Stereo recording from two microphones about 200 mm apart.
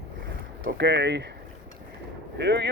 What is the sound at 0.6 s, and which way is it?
Speech, 60° right (ahead or behind).